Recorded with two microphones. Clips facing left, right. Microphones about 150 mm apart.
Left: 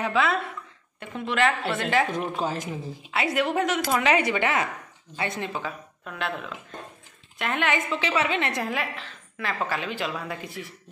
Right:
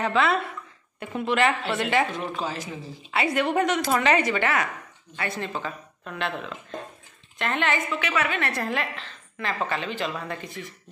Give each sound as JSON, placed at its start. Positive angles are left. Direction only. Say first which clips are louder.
{"t": 0.0, "sound": "a woman's voice", "louder": "right 1 dB", "side_deg": 5}
{"t": 2.4, "sound": "a man's voice", "louder": "left 3 dB", "side_deg": 45}
{"t": 3.1, "sound": "a woman's voice", "louder": "right 1 dB", "side_deg": 0}
{"t": 5.5, "sound": "a woman's voice", "louder": "even", "side_deg": 5}
{"t": 7.9, "sound": "a woman's voice", "louder": "left 1 dB", "side_deg": 25}